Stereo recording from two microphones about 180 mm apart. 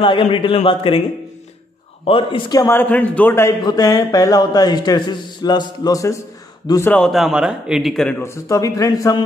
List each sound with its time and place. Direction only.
0.0 s a man's voice: 30° left (ahead or behind)
2.0 s a man's voice: 30° left (ahead or behind); by 7.0 s 15° left (ahead or behind)
7.0 s a man's voice: centre (ahead or behind)
8.2 s a man's voice: 15° left (ahead or behind)